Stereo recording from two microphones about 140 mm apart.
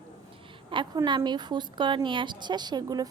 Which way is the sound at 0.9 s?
30° right (ahead or behind).